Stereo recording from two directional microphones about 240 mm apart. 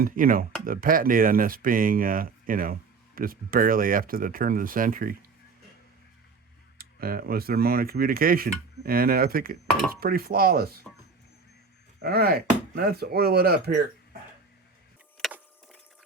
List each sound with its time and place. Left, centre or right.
0.0 s speech: right
6.7 s speech: right
12.0 s speech: right
15.2 s a sound: centre